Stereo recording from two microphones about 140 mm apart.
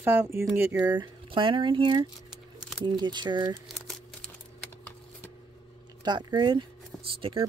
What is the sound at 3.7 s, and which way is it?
Crumpling, centre (ahead or behind).